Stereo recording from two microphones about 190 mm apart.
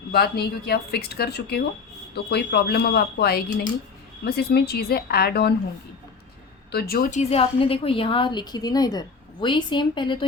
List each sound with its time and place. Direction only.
0.1 s speech: 55° left (ahead or behind)
6.7 s a woman's voice: 55° left (ahead or behind); by 10.2 s 25° left (ahead or behind)